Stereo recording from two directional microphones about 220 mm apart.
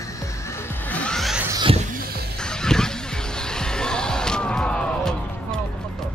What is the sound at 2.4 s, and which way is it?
Music, 5° left (ahead or behind).